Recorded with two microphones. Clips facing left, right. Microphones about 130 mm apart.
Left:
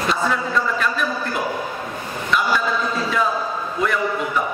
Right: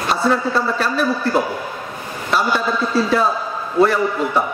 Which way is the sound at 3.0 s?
35° right (ahead or behind).